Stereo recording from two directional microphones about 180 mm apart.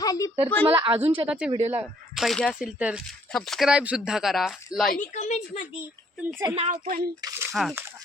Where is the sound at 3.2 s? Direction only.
5° left (ahead or behind).